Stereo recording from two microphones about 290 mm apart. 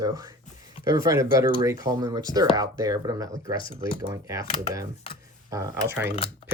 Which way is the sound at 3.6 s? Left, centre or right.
Centre.